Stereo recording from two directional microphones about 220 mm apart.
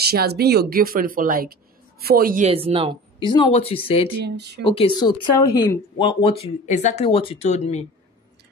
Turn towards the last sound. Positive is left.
turn(degrees=30)  # may be behind; listen again after turning